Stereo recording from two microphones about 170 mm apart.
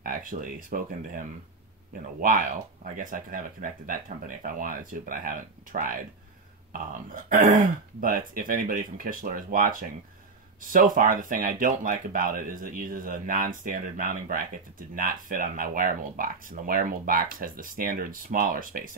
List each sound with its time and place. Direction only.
0.0 s speech: 55° right (ahead or behind)